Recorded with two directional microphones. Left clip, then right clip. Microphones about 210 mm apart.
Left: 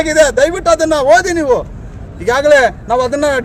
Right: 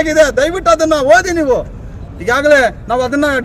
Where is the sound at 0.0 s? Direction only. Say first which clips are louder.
Left 1 dB; 5° right (ahead or behind).